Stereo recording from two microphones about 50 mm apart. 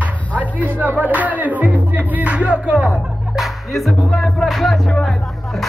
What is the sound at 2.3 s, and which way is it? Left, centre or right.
Music, right.